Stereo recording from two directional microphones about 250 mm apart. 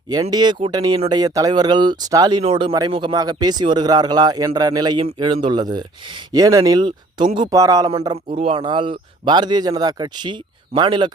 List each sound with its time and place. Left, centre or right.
0.1 s speech: centre